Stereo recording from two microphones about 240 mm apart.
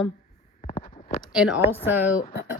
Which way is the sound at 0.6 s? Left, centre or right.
Left.